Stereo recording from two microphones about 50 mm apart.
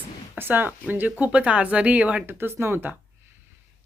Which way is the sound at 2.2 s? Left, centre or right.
Right.